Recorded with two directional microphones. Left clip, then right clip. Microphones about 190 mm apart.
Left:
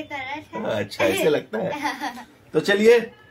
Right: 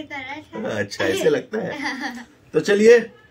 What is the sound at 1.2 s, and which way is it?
Speech, 10° right (ahead or behind).